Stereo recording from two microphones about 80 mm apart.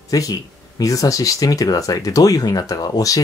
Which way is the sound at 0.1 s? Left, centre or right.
Left.